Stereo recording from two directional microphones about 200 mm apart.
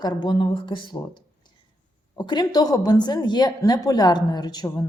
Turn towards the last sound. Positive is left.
turn(degrees=20)  # may be behind; listen again after turning